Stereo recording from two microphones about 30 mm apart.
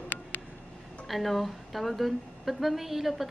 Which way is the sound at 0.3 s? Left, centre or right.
Left.